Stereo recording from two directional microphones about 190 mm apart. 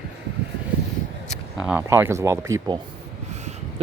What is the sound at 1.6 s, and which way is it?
Speech, 10° right (ahead or behind).